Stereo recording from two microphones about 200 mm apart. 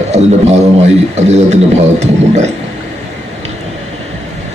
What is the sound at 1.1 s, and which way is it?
Speech, 35° right (ahead or behind).